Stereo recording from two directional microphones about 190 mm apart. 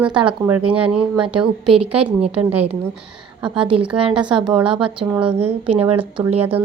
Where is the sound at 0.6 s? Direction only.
30° right (ahead or behind).